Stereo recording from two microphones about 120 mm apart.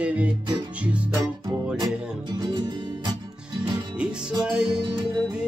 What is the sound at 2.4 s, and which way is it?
Music, 35° right (ahead or behind).